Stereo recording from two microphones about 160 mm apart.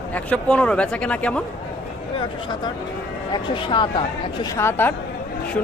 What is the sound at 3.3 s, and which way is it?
Speech, 30° left (ahead or behind).